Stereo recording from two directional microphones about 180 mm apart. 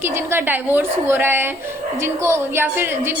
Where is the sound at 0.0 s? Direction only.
15° right (ahead or behind).